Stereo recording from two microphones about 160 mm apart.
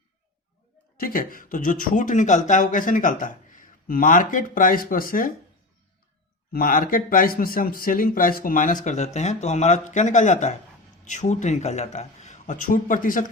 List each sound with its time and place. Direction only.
0.9 s speech: 60° left (ahead or behind)
6.5 s speech: 65° left (ahead or behind)